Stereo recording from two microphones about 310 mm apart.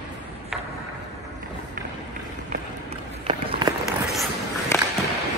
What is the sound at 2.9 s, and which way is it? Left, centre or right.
Run, centre.